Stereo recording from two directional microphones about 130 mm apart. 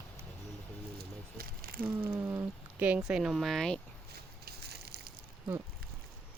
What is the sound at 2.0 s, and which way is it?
Speech, 20° right (ahead or behind).